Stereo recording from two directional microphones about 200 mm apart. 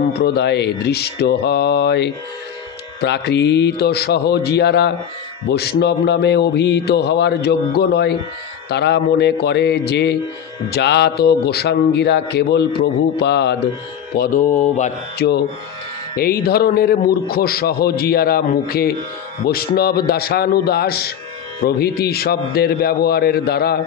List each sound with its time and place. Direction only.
0.2 s speech: 55° left (ahead or behind)
14.1 s a man's voice: 45° left (ahead or behind)